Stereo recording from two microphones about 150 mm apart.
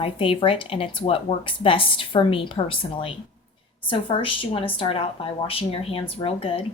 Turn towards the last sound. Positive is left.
turn(degrees=35)  # may be behind; listen again after turning